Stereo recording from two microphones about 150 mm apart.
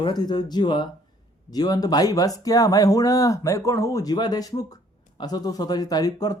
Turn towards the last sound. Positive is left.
turn(degrees=25)  # may be behind; listen again after turning